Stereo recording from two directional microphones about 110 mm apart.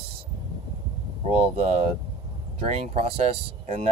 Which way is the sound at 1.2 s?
70° right (ahead or behind).